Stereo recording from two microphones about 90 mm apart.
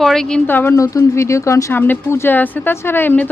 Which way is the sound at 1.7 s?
25° left (ahead or behind).